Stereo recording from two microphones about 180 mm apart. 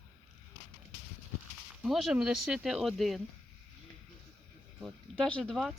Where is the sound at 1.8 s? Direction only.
Centre (ahead or behind).